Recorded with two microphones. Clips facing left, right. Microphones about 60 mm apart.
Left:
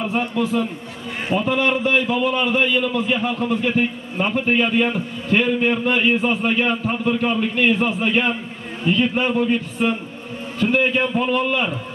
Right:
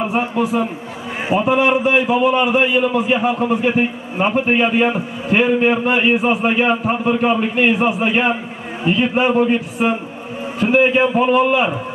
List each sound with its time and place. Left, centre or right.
0.0 s a man's voice: centre